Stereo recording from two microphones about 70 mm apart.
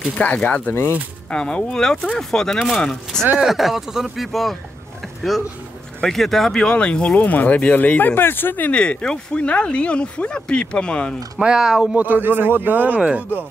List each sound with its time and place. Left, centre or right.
0.1 s speech: left
1.3 s speech: centre
3.3 s speech: centre
5.0 s a sound: centre
5.9 s speech: centre
11.3 s speech: centre